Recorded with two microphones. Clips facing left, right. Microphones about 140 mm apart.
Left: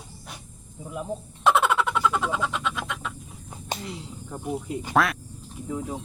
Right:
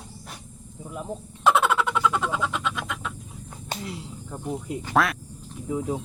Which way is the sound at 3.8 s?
Centre (ahead or behind).